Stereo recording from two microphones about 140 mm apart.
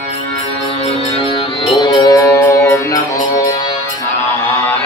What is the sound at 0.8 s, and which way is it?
Music, 40° left (ahead or behind).